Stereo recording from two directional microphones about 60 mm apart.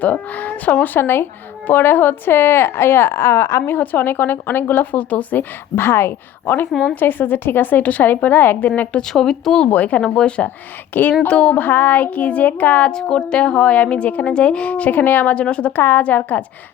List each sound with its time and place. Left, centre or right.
0.0 s a woman's voice: left
0.9 s speech: left
3.7 s speech: left
5.7 s a woman's voice: left
6.7 s a woman's voice: centre
6.9 s speech: left
9.0 s a woman's voice: centre
9.6 s a woman's voice: left
10.0 s a woman's voice: centre
10.9 s speech: left
11.3 s a woman's voice: centre
11.6 s a woman's voice: left
12.9 s a woman's voice: centre
15.7 s a woman's voice: left